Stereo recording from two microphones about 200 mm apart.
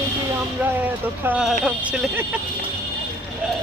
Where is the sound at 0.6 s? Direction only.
10° right (ahead or behind).